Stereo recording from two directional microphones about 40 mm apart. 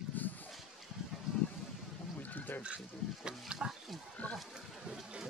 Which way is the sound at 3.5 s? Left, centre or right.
Centre.